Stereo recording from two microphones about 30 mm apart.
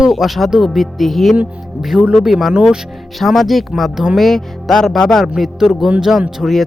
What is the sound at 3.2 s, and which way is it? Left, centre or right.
Speech, centre.